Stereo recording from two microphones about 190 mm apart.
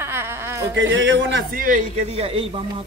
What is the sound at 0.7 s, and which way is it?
Speech, 80° right.